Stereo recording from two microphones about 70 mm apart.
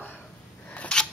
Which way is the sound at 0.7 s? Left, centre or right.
Centre.